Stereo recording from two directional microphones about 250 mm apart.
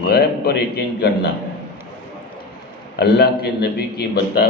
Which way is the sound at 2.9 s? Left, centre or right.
Left.